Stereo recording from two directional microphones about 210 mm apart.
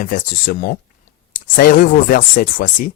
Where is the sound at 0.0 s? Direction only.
40° left (ahead or behind).